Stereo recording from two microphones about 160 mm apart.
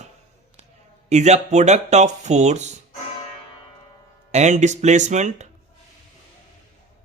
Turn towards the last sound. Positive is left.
turn(degrees=-45)  # may be behind; listen again after turning